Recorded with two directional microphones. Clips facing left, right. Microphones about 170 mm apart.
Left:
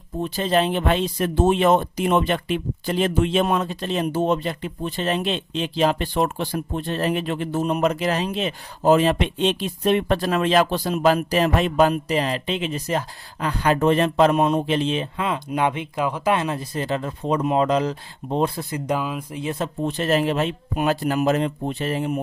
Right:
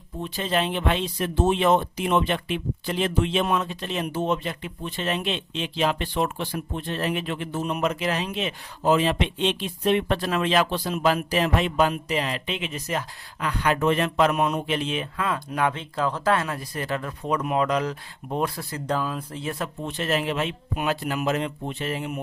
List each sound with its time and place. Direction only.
0.2 s speech: 40° left (ahead or behind); by 19.7 s 20° left (ahead or behind)
19.8 s speech: 35° left (ahead or behind)